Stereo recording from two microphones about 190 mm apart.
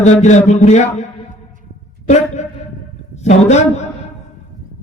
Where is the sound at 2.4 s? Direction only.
40° left (ahead or behind).